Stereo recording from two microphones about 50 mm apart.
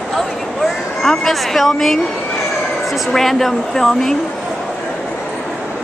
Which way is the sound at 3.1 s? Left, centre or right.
Centre.